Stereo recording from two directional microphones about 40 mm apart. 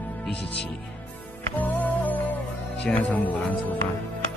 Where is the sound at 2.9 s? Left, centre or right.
Left.